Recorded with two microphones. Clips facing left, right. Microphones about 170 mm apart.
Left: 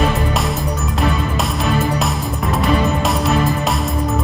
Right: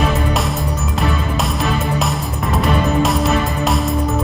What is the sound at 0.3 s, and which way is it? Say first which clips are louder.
Music: even; centre (ahead or behind).